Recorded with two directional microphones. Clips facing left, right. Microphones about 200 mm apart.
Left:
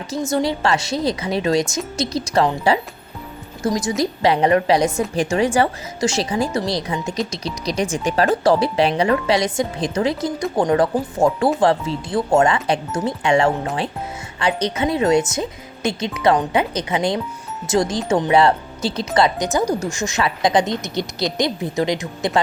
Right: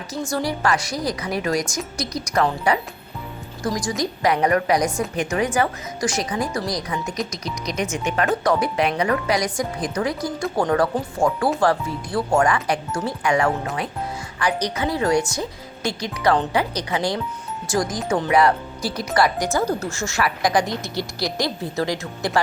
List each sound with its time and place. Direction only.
0.1 s a woman's voice: 20° left (ahead or behind)